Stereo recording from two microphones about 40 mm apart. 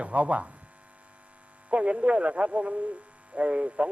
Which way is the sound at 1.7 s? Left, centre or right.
Right.